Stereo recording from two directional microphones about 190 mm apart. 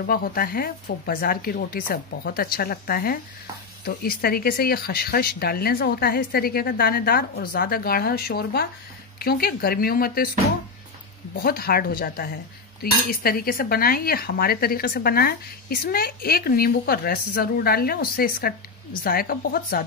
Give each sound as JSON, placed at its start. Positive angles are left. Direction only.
{"t": 0.0, "sound": "speech", "side_deg": 50}
{"t": 11.3, "sound": "speech", "side_deg": 50}